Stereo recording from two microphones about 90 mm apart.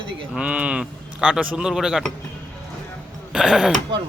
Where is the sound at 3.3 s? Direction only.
5° right (ahead or behind).